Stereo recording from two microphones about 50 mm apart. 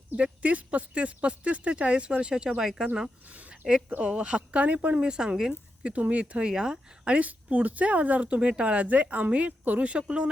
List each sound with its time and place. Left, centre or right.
0.2 s a woman's voice: right
3.2 s speech: right
3.5 s a sound: centre
3.8 s a woman's voice: right
4.9 s speech: centre
5.8 s a woman's voice: right
6.5 s speech: centre
7.0 s a woman's voice: right